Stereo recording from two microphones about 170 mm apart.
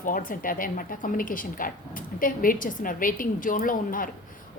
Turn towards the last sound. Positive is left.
turn(degrees=55)  # may be behind; listen again after turning